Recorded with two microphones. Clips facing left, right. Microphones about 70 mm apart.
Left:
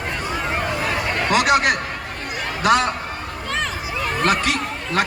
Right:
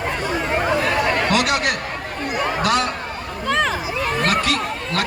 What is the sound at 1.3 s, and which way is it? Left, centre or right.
A man's voice, left.